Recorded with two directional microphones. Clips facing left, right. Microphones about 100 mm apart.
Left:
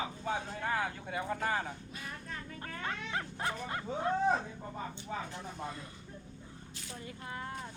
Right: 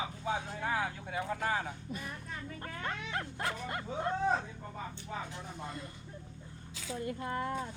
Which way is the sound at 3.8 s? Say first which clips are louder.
Left 2 dB; 10° left (ahead or behind).